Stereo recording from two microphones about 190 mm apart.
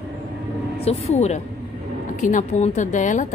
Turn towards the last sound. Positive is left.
turn(degrees=40)  # may be behind; listen again after turning